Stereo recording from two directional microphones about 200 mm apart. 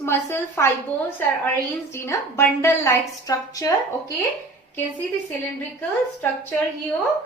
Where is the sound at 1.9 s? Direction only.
10° left (ahead or behind).